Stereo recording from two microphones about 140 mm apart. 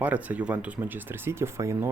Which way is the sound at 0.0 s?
10° right (ahead or behind).